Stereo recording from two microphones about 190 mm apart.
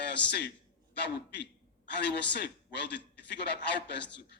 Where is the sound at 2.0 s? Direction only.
65° left (ahead or behind).